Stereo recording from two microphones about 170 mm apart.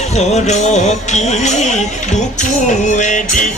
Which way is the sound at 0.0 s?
40° left (ahead or behind).